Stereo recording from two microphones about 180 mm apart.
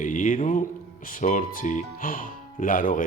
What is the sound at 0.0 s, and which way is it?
Speech, 45° left (ahead or behind).